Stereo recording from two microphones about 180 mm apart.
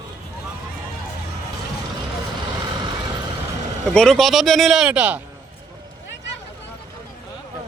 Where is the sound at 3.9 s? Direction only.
5° left (ahead or behind).